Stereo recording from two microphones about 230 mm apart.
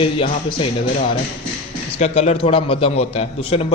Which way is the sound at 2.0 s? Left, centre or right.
Left.